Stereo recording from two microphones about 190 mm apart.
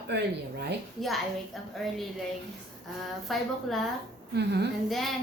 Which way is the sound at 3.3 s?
Centre (ahead or behind).